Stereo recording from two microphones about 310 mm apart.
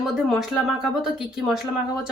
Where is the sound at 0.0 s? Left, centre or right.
Centre.